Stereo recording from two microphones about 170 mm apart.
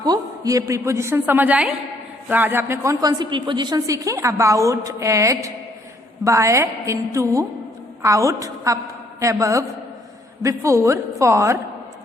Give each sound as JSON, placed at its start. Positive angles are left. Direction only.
{"t": 0.0, "sound": "a woman's voice", "side_deg": -20}